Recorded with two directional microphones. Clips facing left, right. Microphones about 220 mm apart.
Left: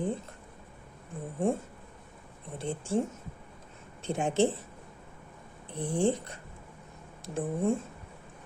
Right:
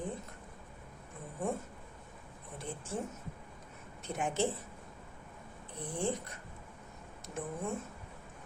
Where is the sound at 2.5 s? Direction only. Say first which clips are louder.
Left 9 dB; 30° left (ahead or behind).